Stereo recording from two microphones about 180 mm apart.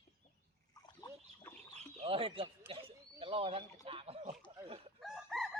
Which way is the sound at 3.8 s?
30° right (ahead or behind).